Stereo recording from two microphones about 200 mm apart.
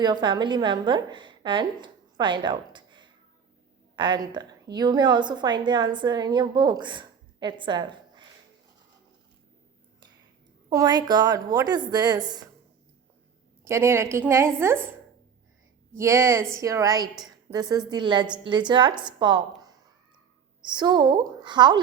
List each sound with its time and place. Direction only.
0.0 s a woman's voice: 20° right (ahead or behind)
10.7 s a woman's voice: 20° right (ahead or behind)
13.7 s a woman's voice: 15° right (ahead or behind)
16.0 s a woman's voice: 15° right (ahead or behind)
20.7 s a woman's voice: 20° right (ahead or behind)